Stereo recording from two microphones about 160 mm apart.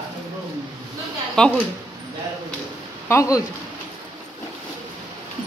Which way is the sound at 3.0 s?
20° left (ahead or behind).